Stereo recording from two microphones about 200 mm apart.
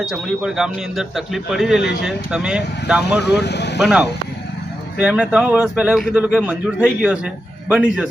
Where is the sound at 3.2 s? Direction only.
55° left (ahead or behind).